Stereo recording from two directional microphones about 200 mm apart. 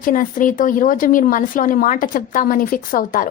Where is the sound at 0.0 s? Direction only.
40° left (ahead or behind).